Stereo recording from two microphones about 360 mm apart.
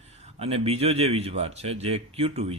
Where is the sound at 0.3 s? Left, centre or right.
Centre.